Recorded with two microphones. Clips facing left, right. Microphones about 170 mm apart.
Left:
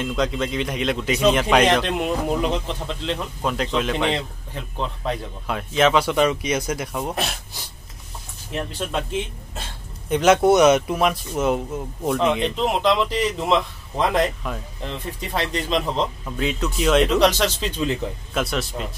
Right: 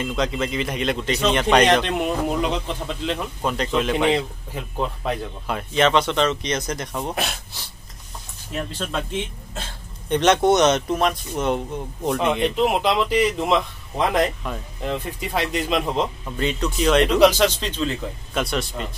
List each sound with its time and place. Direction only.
0.0 s speech: centre (ahead or behind)
10.0 s speech: 5° left (ahead or behind)